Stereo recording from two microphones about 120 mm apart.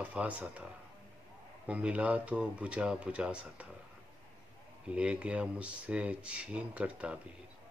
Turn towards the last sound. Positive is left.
turn(degrees=-10)  # may be behind; listen again after turning